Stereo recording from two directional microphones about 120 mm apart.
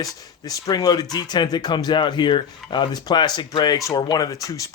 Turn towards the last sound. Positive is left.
turn(degrees=30)  # may be behind; listen again after turning